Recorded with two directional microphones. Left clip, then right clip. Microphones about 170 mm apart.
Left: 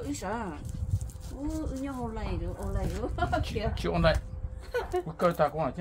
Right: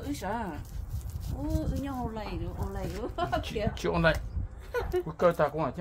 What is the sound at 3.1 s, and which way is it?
Speech, 35° right (ahead or behind).